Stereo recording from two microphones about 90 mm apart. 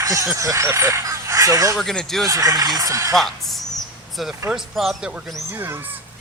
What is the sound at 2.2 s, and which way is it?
Speech, 40° right (ahead or behind).